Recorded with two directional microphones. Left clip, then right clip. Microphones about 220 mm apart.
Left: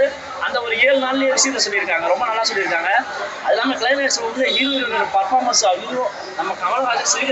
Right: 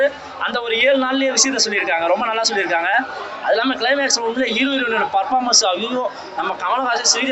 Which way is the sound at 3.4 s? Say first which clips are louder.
Even; 50° right (ahead or behind).